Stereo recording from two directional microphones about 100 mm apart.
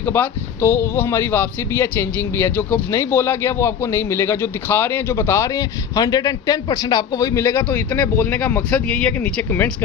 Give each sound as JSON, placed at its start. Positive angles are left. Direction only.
{"t": 0.0, "sound": "a man's voice", "side_deg": 20}